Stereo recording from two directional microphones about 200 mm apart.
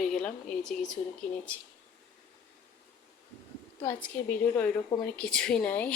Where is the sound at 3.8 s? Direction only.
10° left (ahead or behind).